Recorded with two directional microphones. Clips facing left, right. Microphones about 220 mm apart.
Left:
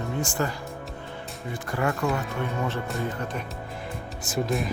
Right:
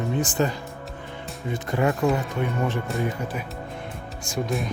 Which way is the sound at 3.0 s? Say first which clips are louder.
Right 2 dB; 10° right (ahead or behind).